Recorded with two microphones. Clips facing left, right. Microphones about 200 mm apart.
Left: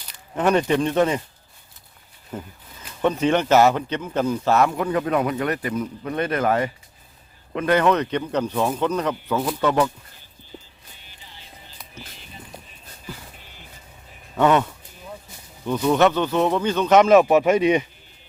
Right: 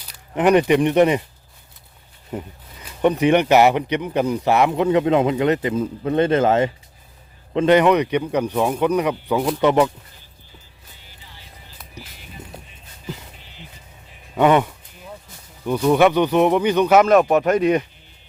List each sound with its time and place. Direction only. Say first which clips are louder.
0.3 s speech: right 4 dB; 15° right (ahead or behind)
3.0 s speech: right 4 dB; 15° right (ahead or behind)
13.4 s music: right 4 dB; 50° left (ahead or behind)
14.3 s speech: right 2 dB; 15° right (ahead or behind)
17.0 s speech: even; centre (ahead or behind)